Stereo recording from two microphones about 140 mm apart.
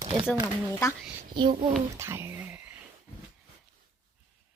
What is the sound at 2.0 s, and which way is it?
Whispering, 15° right (ahead or behind).